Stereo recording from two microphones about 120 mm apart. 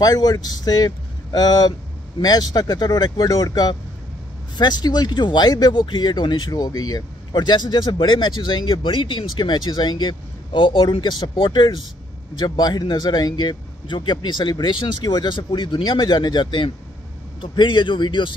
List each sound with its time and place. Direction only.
0.0 s speech: 35° left (ahead or behind)